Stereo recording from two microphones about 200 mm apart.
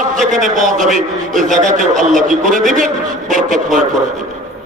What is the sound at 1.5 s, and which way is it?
Speech, 40° right (ahead or behind).